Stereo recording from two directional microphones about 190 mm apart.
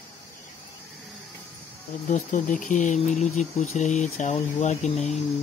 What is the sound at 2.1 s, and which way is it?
Speech, 40° left (ahead or behind).